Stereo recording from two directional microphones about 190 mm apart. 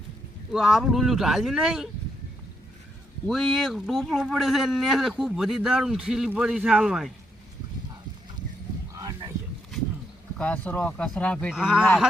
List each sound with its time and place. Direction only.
0.5 s speech: centre (ahead or behind)
3.2 s speech: centre (ahead or behind)
8.9 s a sound: 20° right (ahead or behind)
10.3 s speech: 5° left (ahead or behind)